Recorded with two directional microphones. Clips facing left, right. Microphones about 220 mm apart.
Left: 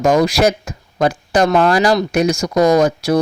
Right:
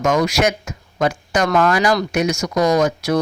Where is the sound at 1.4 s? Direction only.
25° left (ahead or behind).